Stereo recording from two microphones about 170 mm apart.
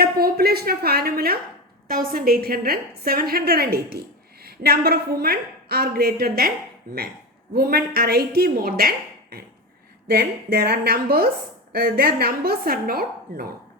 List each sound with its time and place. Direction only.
0.0 s a woman's voice: 65° right (ahead or behind)
7.5 s a woman's voice: 65° right (ahead or behind)
10.1 s a woman's voice: 65° right (ahead or behind)